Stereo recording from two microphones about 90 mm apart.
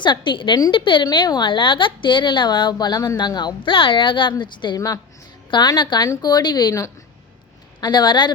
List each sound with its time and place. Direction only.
0.0 s speech: 60° left (ahead or behind)
1.1 s speech: 55° left (ahead or behind)